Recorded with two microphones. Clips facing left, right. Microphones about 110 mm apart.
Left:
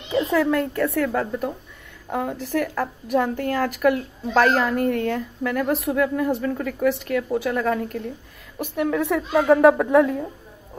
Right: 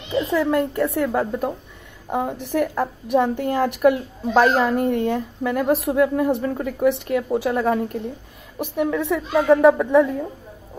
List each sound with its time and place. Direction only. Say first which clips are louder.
0.3 s a woman's voice: right 2 dB; 15° right (ahead or behind)
2.5 s a woman's voice: right 3 dB; 25° right (ahead or behind)
8.7 s a woman's voice: even; centre (ahead or behind)